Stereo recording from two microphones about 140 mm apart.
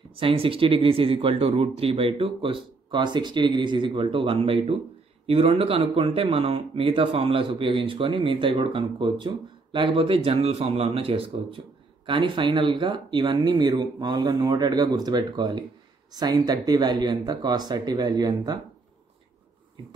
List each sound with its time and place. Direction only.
0.1 s speech: 40° right (ahead or behind)